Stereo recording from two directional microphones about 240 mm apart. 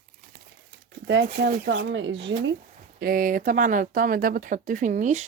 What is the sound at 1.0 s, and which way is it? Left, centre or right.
Speech, right.